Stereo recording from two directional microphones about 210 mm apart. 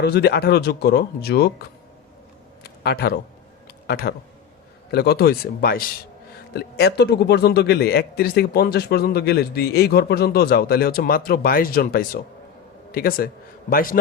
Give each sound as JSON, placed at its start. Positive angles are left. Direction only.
{"t": 0.0, "sound": "a man's voice", "side_deg": 50}
{"t": 2.8, "sound": "a man's voice", "side_deg": 50}